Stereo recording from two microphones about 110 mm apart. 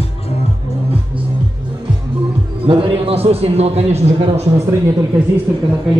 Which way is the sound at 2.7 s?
60° right (ahead or behind).